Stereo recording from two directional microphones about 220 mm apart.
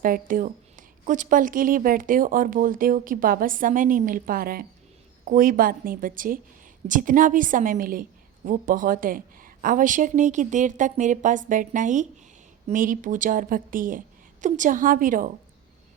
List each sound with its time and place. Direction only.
0.0 s a woman's voice: 40° right (ahead or behind)